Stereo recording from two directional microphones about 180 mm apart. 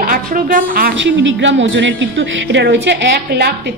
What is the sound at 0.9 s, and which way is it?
A woman's voice, 90° right.